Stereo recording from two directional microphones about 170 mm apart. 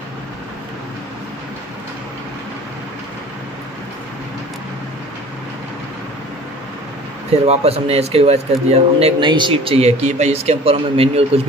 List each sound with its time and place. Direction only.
7.4 s a man's voice: 35° right (ahead or behind)